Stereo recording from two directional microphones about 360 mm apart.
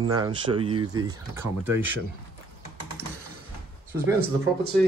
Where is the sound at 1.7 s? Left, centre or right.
Right.